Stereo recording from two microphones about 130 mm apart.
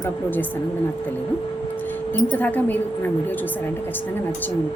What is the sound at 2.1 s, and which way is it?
A woman's voice, 15° left (ahead or behind).